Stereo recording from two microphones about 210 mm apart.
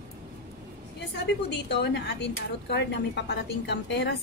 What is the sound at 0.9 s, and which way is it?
A woman's voice, 55° left (ahead or behind).